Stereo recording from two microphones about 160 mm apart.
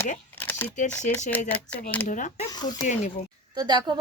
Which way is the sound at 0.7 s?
50° left (ahead or behind).